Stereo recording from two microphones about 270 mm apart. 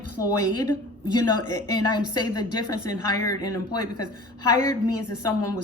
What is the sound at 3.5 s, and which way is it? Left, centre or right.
Speech, left.